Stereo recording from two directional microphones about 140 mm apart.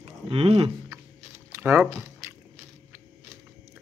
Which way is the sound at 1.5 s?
15° right (ahead or behind).